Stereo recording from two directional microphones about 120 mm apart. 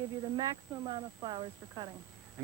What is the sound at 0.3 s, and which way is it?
Speech, 35° right (ahead or behind).